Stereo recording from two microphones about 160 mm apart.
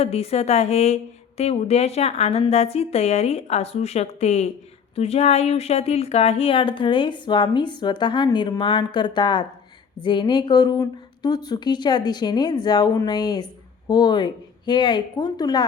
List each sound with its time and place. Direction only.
0.0 s a woman's voice: 40° left (ahead or behind)